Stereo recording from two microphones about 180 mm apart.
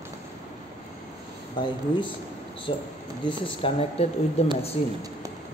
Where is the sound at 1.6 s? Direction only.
25° left (ahead or behind).